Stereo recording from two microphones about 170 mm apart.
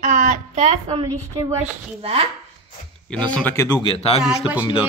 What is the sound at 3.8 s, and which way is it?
Speech, 35° left (ahead or behind).